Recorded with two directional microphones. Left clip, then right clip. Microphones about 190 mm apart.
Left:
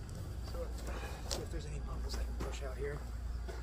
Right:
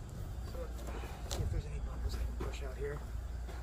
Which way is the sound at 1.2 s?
10° left (ahead or behind).